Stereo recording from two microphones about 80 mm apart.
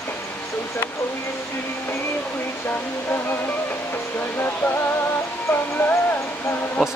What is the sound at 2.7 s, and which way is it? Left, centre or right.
Speech, left.